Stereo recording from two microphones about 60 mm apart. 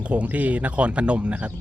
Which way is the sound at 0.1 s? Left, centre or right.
Right.